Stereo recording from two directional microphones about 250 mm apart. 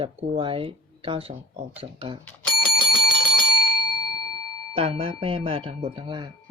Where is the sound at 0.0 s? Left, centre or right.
Centre.